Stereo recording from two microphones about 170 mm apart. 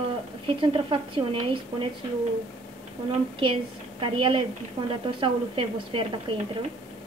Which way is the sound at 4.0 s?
30° right (ahead or behind).